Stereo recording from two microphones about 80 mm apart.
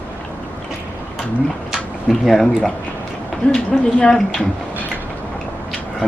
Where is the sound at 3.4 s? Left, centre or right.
Centre.